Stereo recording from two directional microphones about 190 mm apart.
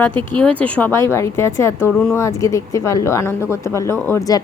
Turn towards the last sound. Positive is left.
turn(degrees=15)  # may be behind; listen again after turning